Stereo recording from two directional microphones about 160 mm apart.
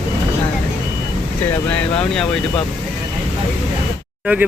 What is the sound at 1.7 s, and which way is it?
Speech, 5° left (ahead or behind).